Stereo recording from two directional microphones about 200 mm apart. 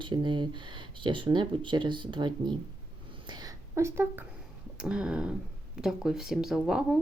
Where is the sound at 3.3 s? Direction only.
15° right (ahead or behind).